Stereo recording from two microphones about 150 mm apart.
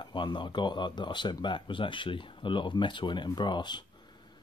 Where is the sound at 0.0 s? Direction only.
30° left (ahead or behind).